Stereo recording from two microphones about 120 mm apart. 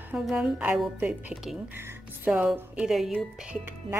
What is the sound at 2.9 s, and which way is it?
Speech, centre (ahead or behind).